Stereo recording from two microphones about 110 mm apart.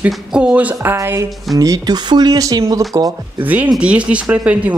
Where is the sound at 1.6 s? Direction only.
35° right (ahead or behind).